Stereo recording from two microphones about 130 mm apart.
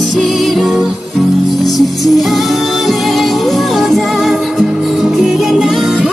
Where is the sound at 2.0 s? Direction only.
Centre (ahead or behind).